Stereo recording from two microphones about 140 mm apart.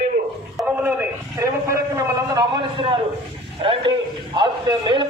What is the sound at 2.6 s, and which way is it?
A man's voice, 40° right (ahead or behind).